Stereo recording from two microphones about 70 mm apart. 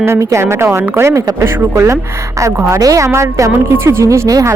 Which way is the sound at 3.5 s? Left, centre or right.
Right.